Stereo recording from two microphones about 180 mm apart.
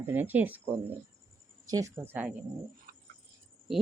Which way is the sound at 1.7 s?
15° right (ahead or behind).